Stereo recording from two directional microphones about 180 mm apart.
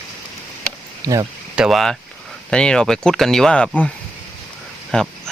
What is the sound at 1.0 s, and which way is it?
Speech, 20° right (ahead or behind).